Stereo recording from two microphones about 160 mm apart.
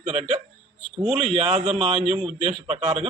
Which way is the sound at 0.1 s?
40° right (ahead or behind).